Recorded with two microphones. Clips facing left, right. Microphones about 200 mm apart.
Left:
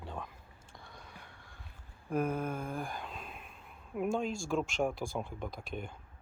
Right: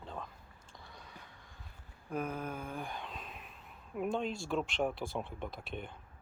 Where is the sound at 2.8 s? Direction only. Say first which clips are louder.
Left 2 dB; 5° left (ahead or behind).